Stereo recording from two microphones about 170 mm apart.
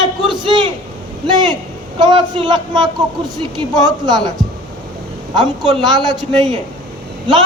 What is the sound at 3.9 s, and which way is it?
A man's voice, 25° right (ahead or behind).